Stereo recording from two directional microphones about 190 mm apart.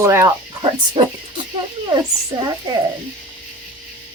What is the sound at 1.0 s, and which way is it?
A woman's voice, 30° right (ahead or behind).